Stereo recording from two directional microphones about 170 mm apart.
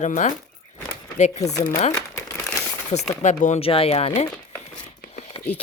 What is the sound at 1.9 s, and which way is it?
Crumpling, 15° left (ahead or behind).